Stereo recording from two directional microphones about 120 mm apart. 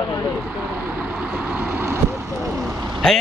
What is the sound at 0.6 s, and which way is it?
Vehicle, 10° right (ahead or behind).